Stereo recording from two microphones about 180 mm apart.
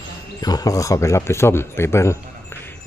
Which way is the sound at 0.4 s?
20° left (ahead or behind).